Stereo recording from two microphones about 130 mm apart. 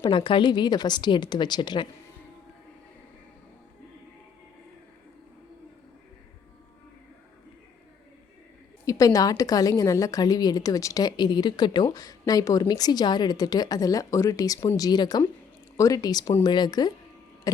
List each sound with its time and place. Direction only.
0.0 s a woman's voice: 40° left (ahead or behind)
8.8 s a woman's voice: 25° left (ahead or behind)